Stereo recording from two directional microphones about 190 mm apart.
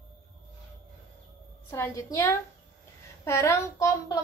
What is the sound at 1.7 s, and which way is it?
A woman's voice, 15° left (ahead or behind).